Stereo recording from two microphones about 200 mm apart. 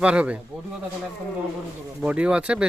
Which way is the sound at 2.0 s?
5° right (ahead or behind).